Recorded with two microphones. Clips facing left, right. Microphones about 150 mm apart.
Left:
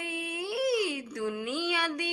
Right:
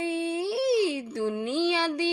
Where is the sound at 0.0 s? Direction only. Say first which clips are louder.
Right 8 dB; 30° right (ahead or behind).